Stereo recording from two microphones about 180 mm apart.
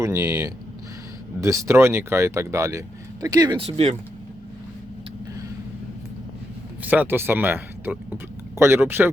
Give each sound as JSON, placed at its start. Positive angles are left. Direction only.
{"t": 0.0, "sound": "speech", "side_deg": -15}
{"t": 6.8, "sound": "speech", "side_deg": -10}